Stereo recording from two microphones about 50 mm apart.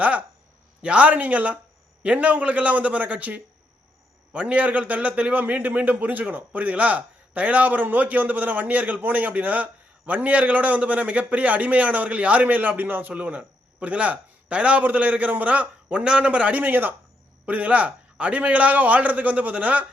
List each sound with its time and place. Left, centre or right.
0.8 s a man's voice: right